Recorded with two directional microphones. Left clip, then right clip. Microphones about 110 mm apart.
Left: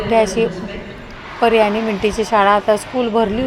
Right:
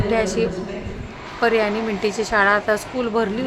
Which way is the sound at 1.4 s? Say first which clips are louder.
Left 5 dB; 30° left (ahead or behind).